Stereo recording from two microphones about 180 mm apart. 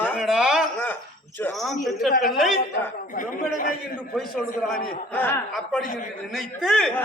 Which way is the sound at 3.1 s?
50° left (ahead or behind).